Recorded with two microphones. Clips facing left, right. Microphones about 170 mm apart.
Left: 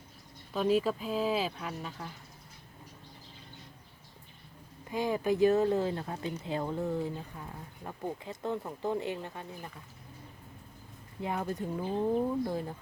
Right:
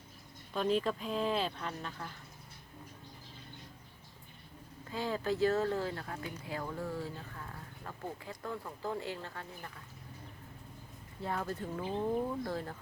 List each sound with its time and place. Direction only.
0.5 s speech: 5° left (ahead or behind)
4.9 s speech: 15° left (ahead or behind)
11.2 s speech: 15° left (ahead or behind)